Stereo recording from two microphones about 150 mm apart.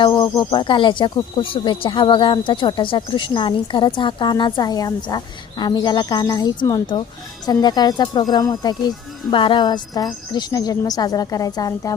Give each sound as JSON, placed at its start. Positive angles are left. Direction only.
{"t": 0.0, "sound": "speech", "side_deg": 30}